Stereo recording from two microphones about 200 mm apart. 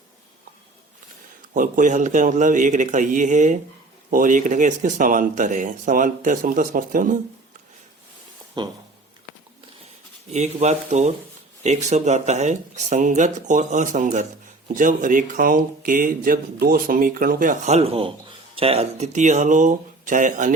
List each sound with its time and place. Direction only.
1.5 s speech: 40° right (ahead or behind)
8.6 s speech: 20° right (ahead or behind)
10.2 s speech: 35° right (ahead or behind)